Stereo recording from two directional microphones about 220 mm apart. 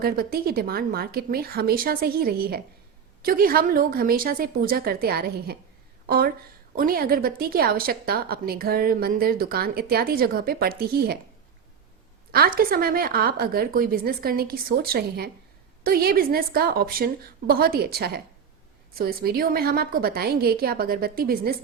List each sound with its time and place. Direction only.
0.0 s a woman's voice: 45° right (ahead or behind)
12.3 s a woman's voice: 45° right (ahead or behind)